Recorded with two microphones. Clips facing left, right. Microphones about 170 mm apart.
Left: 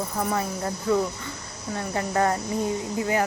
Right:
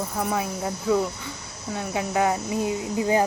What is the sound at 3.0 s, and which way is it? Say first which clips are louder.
Speech: right 4 dB; 20° right (ahead or behind).